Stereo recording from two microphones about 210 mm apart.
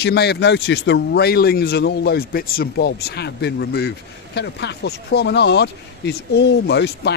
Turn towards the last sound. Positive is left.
turn(degrees=55)  # may be behind; listen again after turning